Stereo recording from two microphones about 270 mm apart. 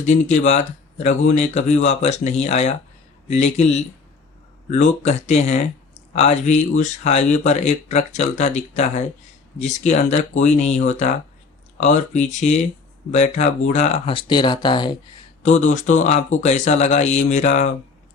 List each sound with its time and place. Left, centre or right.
0.0 s speech: left